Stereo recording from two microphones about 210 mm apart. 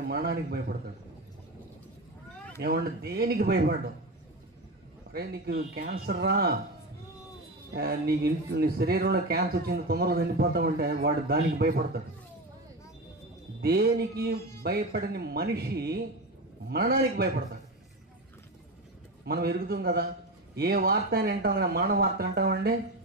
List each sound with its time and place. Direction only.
0.1 s speech: 50° right (ahead or behind)
2.6 s speech: 50° right (ahead or behind)
5.1 s speech: 50° right (ahead or behind)
7.7 s speech: 50° right (ahead or behind)
13.6 s speech: 50° right (ahead or behind)
19.2 s speech: 50° right (ahead or behind)